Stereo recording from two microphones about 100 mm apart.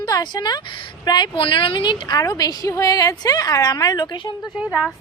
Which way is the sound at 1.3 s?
65° left (ahead or behind).